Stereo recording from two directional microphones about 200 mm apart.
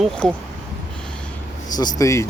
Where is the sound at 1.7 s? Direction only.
20° left (ahead or behind).